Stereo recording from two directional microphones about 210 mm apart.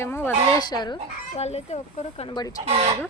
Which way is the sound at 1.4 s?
30° left (ahead or behind).